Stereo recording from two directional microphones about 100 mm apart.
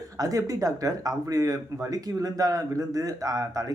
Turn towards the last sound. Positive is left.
turn(degrees=-35)  # may be behind; listen again after turning